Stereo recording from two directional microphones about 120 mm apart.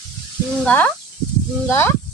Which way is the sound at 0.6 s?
15° left (ahead or behind).